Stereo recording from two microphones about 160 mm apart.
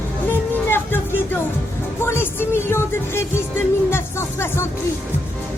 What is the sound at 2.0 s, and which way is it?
Music, 15° left (ahead or behind).